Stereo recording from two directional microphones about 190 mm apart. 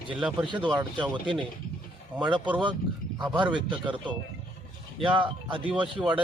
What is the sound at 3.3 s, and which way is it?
Speech, 25° right (ahead or behind).